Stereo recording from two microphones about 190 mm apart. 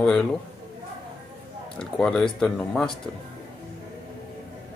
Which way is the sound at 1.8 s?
5° left (ahead or behind).